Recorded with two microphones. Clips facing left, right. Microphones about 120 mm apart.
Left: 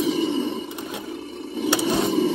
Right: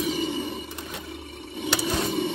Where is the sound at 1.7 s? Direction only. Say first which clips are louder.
Left 5 dB; 20° left (ahead or behind).